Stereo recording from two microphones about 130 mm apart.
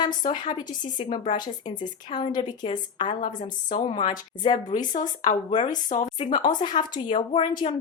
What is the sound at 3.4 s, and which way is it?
Speech, 80° left.